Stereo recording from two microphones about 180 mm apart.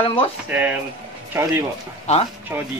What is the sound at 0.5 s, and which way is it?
Speech, 10° right (ahead or behind).